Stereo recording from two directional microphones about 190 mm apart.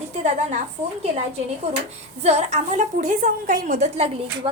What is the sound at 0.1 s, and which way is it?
Speech, 35° right (ahead or behind).